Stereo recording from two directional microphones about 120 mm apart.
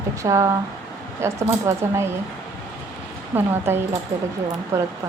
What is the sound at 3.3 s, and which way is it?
A woman's voice, 20° right (ahead or behind).